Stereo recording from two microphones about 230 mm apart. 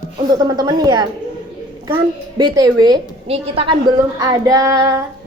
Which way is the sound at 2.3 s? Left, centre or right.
Centre.